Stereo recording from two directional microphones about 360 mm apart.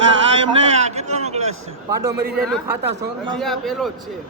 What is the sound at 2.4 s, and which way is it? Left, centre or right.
A man's voice, centre.